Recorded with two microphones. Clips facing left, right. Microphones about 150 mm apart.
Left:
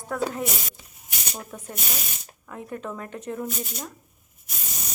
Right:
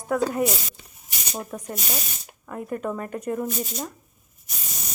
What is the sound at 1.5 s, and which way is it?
Speech, 5° right (ahead or behind).